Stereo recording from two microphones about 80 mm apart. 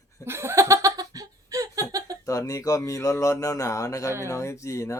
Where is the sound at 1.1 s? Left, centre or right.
Right.